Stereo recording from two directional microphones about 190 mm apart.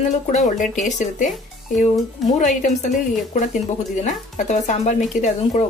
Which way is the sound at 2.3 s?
40° left (ahead or behind).